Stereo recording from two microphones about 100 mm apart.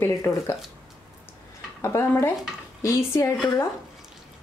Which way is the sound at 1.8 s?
25° left (ahead or behind).